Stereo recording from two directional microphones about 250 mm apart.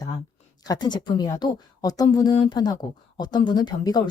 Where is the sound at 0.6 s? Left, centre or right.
Centre.